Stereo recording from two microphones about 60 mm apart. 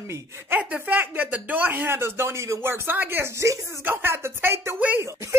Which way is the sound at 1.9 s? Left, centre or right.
Right.